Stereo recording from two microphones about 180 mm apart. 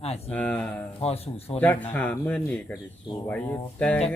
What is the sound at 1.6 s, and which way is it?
Speech, 10° left (ahead or behind).